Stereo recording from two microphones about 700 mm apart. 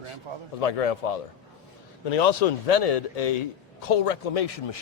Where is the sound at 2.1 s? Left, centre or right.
Left.